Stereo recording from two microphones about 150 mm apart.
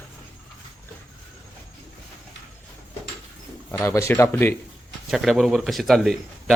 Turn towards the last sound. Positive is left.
turn(degrees=0)  # may be behind; listen again after turning